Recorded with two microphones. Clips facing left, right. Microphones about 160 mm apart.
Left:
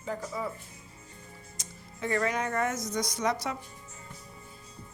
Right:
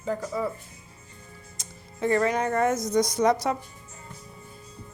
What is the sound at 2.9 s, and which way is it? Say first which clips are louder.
Speech: right 10 dB; 50° right (ahead or behind).